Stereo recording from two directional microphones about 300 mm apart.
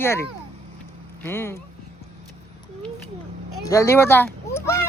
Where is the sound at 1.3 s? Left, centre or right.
Centre.